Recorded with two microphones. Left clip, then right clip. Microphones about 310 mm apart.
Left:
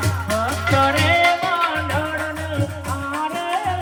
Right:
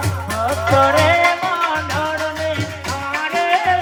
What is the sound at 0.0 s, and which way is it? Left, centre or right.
Music, centre.